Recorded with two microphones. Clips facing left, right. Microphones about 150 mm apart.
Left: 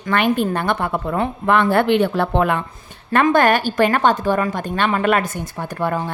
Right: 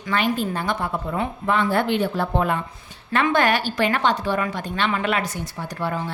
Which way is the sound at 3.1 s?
50° left (ahead or behind).